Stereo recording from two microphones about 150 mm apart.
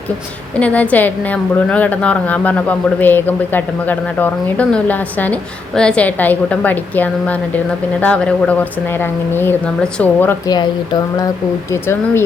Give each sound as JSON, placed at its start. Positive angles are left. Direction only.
{"t": 0.6, "sound": "a woman's voice", "side_deg": 10}
{"t": 11.7, "sound": "a woman's voice", "side_deg": 15}